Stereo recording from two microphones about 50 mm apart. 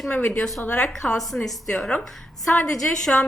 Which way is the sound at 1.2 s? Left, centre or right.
Centre.